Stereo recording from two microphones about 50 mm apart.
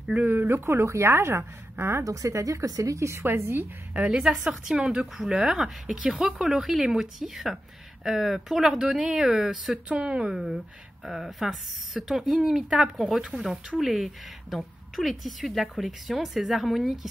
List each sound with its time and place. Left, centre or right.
0.3 s speech: right
0.8 s a woman's voice: right
3.3 s speech: right
4.1 s speech: centre
9.8 s speech: right
10.3 s speech: centre